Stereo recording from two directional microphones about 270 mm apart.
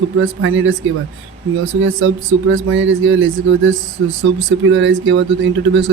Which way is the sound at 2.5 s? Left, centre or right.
Right.